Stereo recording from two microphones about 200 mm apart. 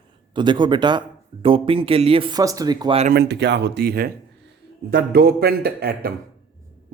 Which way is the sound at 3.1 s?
60° right (ahead or behind).